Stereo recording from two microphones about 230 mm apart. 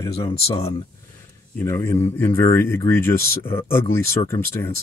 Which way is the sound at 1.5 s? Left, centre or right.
Centre.